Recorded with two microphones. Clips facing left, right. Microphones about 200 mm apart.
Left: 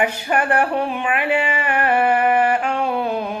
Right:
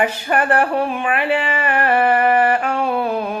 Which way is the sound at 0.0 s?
10° left (ahead or behind).